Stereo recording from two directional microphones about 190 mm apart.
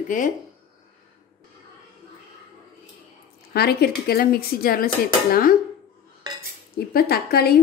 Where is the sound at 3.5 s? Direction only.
55° left (ahead or behind).